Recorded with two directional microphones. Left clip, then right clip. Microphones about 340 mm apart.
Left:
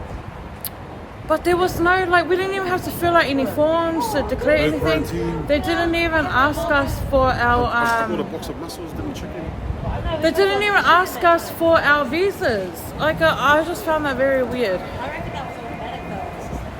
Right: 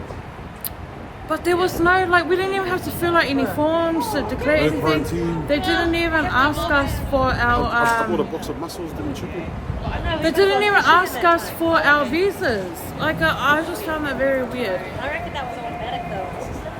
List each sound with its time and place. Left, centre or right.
1.3 s a woman's voice: centre
10.2 s a woman's voice: centre